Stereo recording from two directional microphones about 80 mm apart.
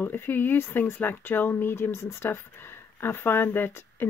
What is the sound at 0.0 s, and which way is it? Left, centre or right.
Speech, left.